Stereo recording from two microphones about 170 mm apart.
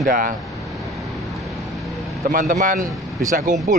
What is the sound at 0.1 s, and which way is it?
Speech, 55° right (ahead or behind).